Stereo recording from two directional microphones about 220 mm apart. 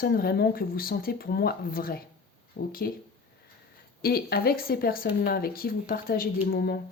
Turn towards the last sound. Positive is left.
turn(degrees=40)  # may be behind; listen again after turning